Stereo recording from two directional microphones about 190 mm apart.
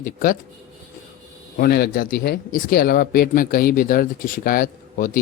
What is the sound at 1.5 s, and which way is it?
Speech, 50° left (ahead or behind).